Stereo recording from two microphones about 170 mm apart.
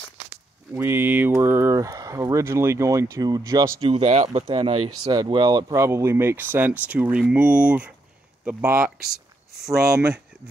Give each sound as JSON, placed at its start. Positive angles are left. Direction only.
{"t": 0.7, "sound": "speech", "side_deg": -15}
{"t": 3.8, "sound": "speech", "side_deg": -40}
{"t": 9.9, "sound": "speech", "side_deg": -5}